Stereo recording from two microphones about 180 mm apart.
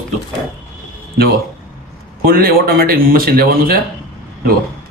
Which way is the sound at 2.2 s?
55° right (ahead or behind).